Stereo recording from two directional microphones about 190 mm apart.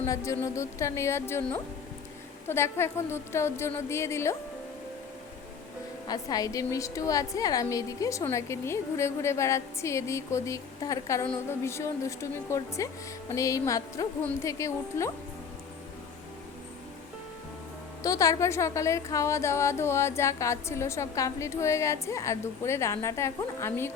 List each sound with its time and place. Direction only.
0.0 s a woman's voice: 15° left (ahead or behind)
6.1 s a woman's voice: 20° left (ahead or behind)
18.0 s a woman's voice: 20° left (ahead or behind)